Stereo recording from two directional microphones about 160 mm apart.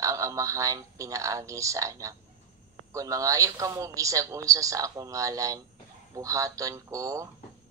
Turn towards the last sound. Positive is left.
turn(degrees=-20)  # may be behind; listen again after turning